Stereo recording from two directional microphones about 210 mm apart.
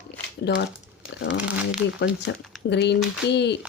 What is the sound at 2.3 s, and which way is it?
Speech, 55° left (ahead or behind).